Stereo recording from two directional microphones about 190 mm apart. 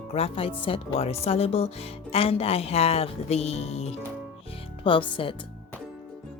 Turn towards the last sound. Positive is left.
turn(degrees=25)  # may be behind; listen again after turning